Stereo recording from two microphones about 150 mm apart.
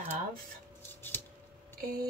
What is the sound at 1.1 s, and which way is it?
Scissors, 15° left (ahead or behind).